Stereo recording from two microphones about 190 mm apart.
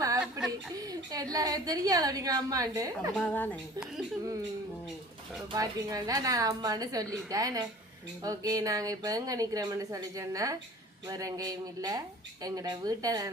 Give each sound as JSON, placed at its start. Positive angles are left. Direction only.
{"t": 0.2, "sound": "a sound", "side_deg": -5}
{"t": 0.8, "sound": "speech", "side_deg": -20}
{"t": 3.2, "sound": "speech", "side_deg": 10}
{"t": 5.5, "sound": "speech", "side_deg": -20}